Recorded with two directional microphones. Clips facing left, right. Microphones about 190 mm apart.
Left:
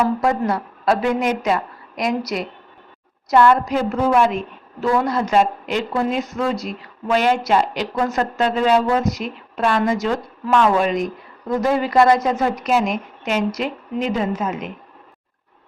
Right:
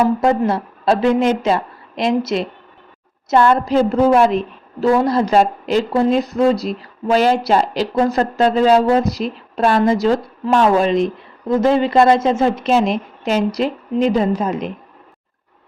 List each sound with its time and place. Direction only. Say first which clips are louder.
0.2 s a woman's voice: right 4 dB; 25° right (ahead or behind)